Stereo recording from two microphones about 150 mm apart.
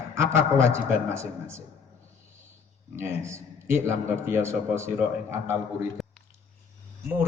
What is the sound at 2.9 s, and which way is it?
A man's voice, 15° right (ahead or behind).